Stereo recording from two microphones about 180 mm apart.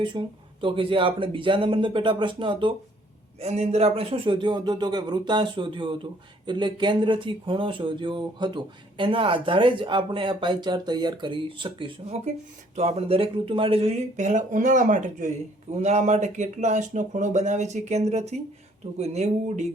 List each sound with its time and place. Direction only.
0.1 s speech: 25° right (ahead or behind)